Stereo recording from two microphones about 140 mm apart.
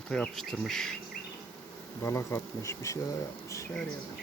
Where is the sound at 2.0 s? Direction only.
20° left (ahead or behind).